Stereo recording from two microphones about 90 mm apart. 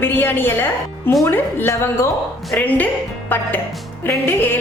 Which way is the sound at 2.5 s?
20° left (ahead or behind).